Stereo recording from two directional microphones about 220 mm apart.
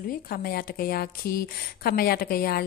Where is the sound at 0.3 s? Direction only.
45° left (ahead or behind).